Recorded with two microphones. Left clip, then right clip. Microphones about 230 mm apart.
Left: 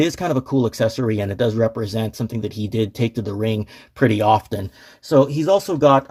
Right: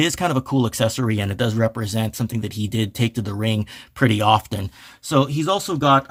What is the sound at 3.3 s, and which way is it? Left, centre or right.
Speech, right.